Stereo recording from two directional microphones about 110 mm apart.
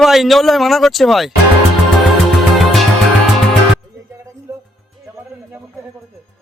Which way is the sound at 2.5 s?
Centre (ahead or behind).